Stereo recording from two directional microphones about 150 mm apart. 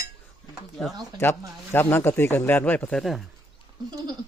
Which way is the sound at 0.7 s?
Centre (ahead or behind).